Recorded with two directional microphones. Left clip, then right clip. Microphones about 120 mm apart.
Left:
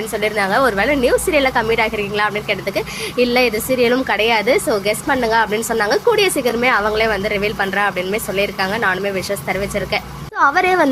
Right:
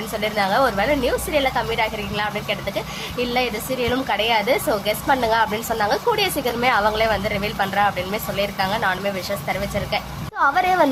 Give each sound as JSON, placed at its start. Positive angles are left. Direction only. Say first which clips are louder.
{"t": 0.1, "sound": "a woman's voice", "louder": "left 3 dB", "side_deg": 30}